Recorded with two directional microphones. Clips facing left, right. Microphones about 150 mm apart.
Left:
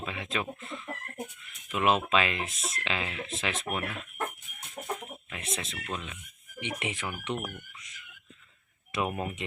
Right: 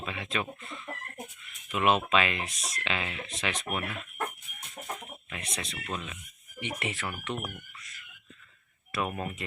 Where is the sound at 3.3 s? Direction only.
Centre (ahead or behind).